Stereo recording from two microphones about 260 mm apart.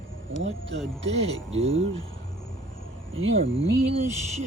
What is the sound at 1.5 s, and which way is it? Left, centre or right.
Speech, right.